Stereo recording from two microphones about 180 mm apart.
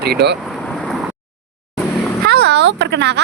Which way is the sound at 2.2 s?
65° right (ahead or behind).